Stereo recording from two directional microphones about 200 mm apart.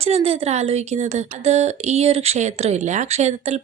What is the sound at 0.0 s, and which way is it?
Speech, 30° right (ahead or behind).